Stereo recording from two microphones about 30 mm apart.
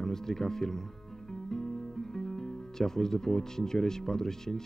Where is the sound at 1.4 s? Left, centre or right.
Centre.